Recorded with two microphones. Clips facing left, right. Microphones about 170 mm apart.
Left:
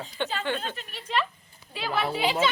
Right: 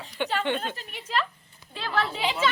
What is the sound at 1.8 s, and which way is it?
Speech, 10° left (ahead or behind).